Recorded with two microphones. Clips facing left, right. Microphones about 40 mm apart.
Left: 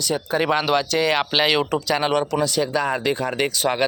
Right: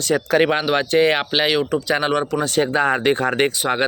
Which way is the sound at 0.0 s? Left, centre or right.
Right.